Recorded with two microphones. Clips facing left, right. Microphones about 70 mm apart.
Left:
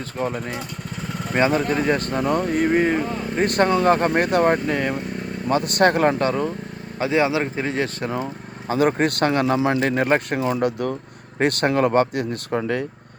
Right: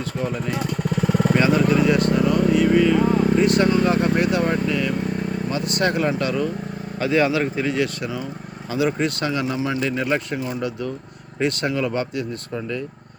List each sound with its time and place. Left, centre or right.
0.2 s speech: left
6.2 s speech: left
7.0 s speech: left
8.7 s speech: left